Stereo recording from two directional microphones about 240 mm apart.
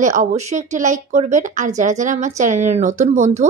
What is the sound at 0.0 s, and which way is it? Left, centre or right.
A woman's voice, right.